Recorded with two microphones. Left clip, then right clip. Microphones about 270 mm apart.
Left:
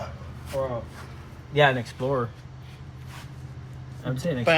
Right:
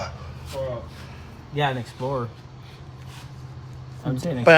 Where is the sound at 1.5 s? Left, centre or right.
Centre.